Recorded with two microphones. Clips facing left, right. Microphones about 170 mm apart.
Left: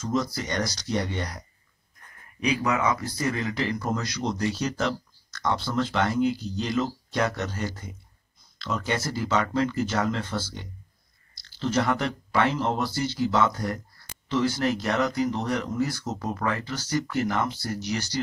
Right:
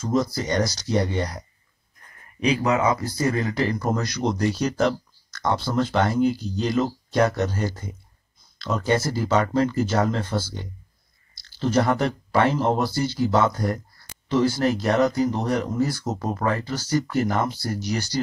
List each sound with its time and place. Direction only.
0.0 s speech: 40° right (ahead or behind)
2.4 s speech: 25° right (ahead or behind)
11.6 s speech: 40° right (ahead or behind)